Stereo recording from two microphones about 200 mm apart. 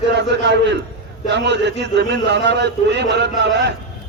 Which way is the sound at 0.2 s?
60° right (ahead or behind).